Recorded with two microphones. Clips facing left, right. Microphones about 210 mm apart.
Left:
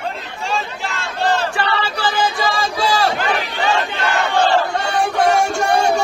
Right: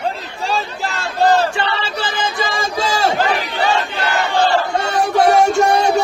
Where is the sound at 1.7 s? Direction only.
25° right (ahead or behind).